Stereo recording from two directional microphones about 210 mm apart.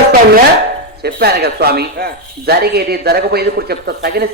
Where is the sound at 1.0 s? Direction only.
50° right (ahead or behind).